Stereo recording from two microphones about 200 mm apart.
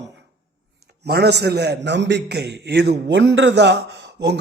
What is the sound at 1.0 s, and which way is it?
A man's voice, 55° right (ahead or behind).